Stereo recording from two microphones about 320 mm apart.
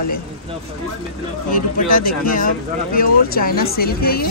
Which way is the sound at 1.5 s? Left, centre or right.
Left.